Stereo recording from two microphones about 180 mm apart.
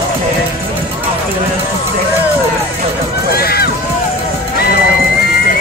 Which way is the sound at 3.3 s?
60° left (ahead or behind).